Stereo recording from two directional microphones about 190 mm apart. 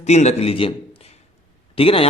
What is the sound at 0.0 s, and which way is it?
Speech, 35° left (ahead or behind).